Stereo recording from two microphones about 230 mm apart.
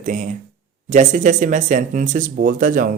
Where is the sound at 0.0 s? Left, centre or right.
Right.